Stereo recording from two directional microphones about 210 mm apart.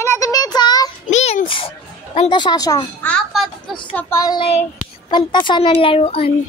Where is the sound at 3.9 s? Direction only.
10° left (ahead or behind); by 6.3 s 25° left (ahead or behind).